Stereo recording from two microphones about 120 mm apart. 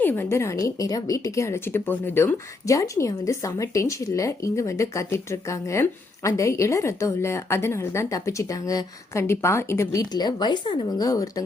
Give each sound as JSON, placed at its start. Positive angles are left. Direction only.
{"t": 0.0, "sound": "a woman's voice", "side_deg": 20}
{"t": 11.0, "sound": "a woman's voice", "side_deg": 30}